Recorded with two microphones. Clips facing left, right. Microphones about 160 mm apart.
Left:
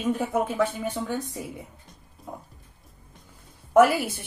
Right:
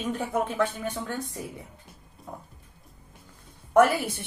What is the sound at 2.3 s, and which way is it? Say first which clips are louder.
Mechanisms: left 2 dB; 10° left (ahead or behind).